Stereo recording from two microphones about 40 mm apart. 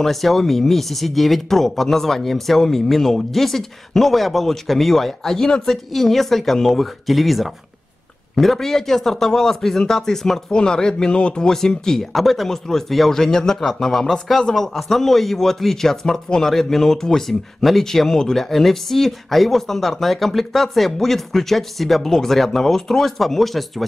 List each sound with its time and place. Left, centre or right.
0.0 s speech: centre; by 11.4 s left
11.4 s speech: centre